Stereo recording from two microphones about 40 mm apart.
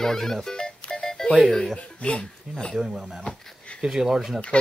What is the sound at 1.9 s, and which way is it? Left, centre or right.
Speech, left.